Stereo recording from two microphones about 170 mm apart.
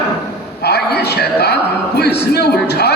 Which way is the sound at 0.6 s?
75° left (ahead or behind).